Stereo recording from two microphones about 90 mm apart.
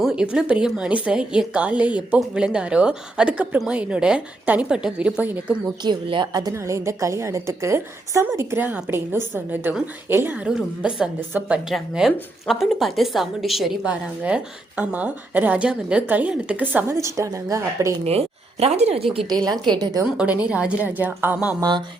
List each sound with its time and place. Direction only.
0.0 s a woman's voice: 10° right (ahead or behind)
5.8 s speech: 60° right (ahead or behind)
6.5 s a woman's voice: 35° right (ahead or behind)
10.4 s a woman's voice: 10° right (ahead or behind)
11.7 s speech: centre (ahead or behind)
13.8 s a woman's voice: 15° right (ahead or behind)
16.9 s a woman's voice: 35° right (ahead or behind)
19.3 s a woman's voice: 50° right (ahead or behind)
20.1 s a woman's voice: 15° right (ahead or behind)
21.6 s speech: 55° right (ahead or behind)